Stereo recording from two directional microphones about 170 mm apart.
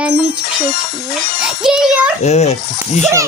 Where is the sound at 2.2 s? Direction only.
40° left (ahead or behind).